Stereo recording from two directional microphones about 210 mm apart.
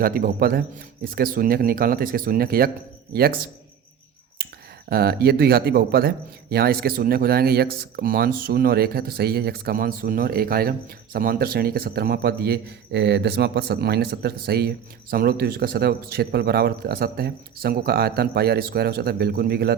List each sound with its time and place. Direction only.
0.0 s a man's voice: 45° right (ahead or behind)
4.9 s a man's voice: 50° right (ahead or behind)